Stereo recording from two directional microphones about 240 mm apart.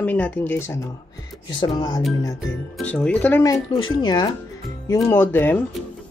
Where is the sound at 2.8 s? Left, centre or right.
Centre.